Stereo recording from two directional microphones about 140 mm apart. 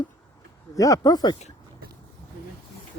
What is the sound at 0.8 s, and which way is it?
Speech, 25° left (ahead or behind).